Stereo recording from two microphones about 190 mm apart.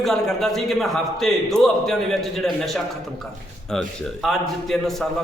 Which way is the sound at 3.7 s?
Centre (ahead or behind).